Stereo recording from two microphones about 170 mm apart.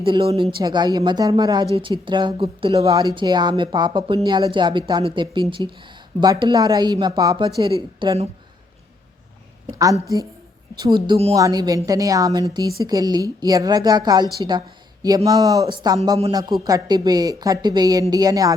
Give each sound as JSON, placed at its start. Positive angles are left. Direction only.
{"t": 0.0, "sound": "speech", "side_deg": -30}
{"t": 10.8, "sound": "speech", "side_deg": -25}
{"t": 11.3, "sound": "speech", "side_deg": -20}
{"t": 15.3, "sound": "speech", "side_deg": -25}